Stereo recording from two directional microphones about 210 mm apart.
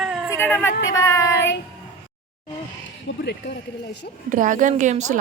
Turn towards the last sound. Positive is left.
turn(degrees=-35)  # may be behind; listen again after turning